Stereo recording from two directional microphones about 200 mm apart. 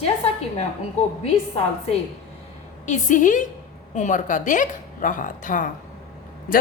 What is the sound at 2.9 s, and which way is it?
A woman's voice, 40° left (ahead or behind).